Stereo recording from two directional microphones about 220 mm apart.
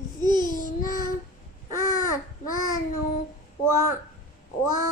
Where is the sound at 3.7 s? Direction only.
15° right (ahead or behind).